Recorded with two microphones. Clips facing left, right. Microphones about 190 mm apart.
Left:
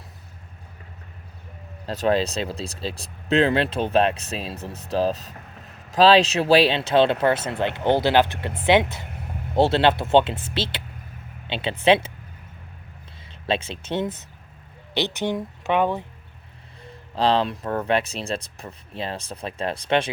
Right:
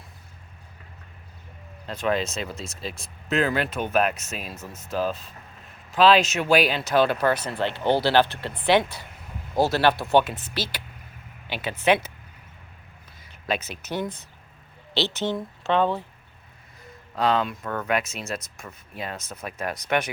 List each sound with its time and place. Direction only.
1.9 s speech: 35° left (ahead or behind)
13.5 s a woman's voice: 30° left (ahead or behind)
16.8 s speech: 30° left (ahead or behind)